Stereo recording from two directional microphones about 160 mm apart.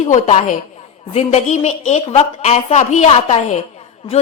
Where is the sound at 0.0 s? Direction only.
45° left (ahead or behind).